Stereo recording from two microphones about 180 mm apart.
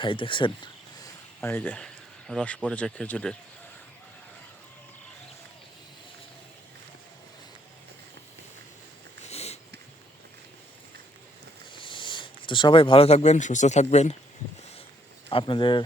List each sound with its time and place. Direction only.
0.0 s speech: 30° left (ahead or behind)
1.4 s speech: 10° left (ahead or behind)
9.2 s sniff: 35° left (ahead or behind)
11.7 s speech: 25° left (ahead or behind)
15.3 s speech: 30° left (ahead or behind)